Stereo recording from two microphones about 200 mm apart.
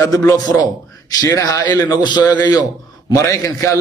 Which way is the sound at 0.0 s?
15° left (ahead or behind).